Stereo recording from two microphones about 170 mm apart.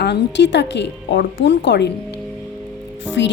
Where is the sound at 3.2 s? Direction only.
90° left.